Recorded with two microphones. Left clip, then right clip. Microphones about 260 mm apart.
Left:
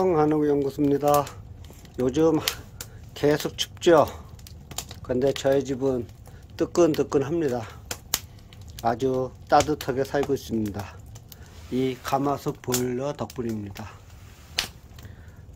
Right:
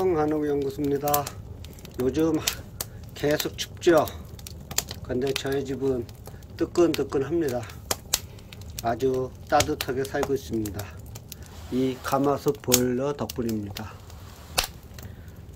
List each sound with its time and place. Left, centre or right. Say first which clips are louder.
0.0 s speech: left 3 dB; left
8.8 s speech: left 1 dB; left; by 13.5 s centre